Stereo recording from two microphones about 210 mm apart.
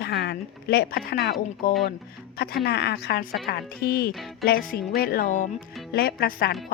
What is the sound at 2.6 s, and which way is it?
A woman's voice, 50° left (ahead or behind).